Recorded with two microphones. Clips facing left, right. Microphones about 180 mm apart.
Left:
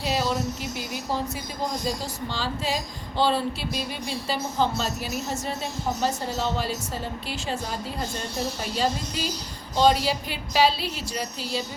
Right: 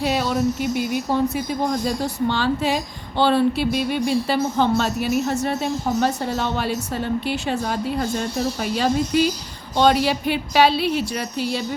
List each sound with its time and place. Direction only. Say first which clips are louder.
0.0 s speech: right 5 dB; 60° right (ahead or behind)
9.1 s speech: right 11 dB; 65° right (ahead or behind)